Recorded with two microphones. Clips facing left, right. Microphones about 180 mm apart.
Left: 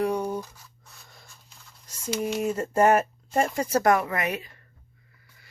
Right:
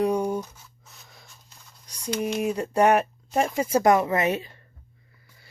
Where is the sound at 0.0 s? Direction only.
15° right (ahead or behind).